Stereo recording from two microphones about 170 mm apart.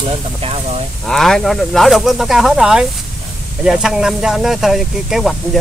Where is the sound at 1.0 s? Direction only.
Centre (ahead or behind).